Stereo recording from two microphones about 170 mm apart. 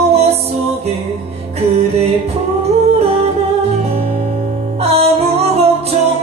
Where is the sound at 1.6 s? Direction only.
40° right (ahead or behind).